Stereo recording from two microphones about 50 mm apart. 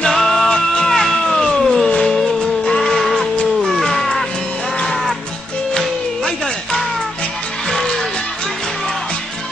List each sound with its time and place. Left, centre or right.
0.0 s music: centre
2.9 s music: centre
5.8 s music: centre